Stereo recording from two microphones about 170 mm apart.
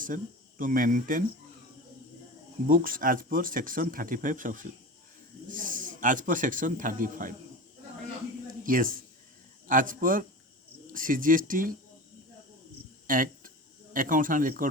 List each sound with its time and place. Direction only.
0.6 s speech: 55° right (ahead or behind)
2.6 s speech: 55° right (ahead or behind)
8.6 s speech: 55° right (ahead or behind)
13.1 s a sound: 55° right (ahead or behind)
13.9 s speech: 50° right (ahead or behind)